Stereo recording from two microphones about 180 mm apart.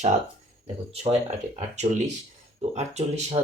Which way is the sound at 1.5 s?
40° right (ahead or behind).